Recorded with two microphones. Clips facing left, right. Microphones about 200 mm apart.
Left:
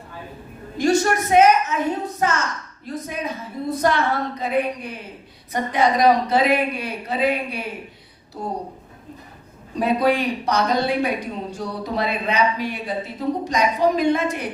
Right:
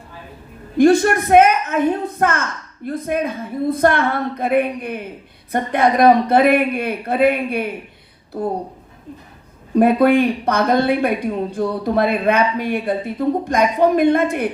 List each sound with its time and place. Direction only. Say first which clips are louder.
0.8 s a woman's voice: right 6 dB; 55° right (ahead or behind)
9.7 s a woman's voice: right 7 dB; 55° right (ahead or behind)